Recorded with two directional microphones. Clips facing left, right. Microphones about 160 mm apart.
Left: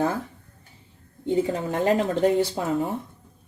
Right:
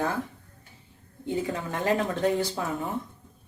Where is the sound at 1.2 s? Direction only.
25° left (ahead or behind).